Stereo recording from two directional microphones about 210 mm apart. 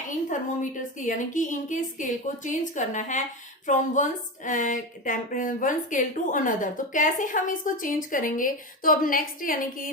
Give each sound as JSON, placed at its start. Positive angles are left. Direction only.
{"t": 0.3, "sound": "a woman's voice", "side_deg": 35}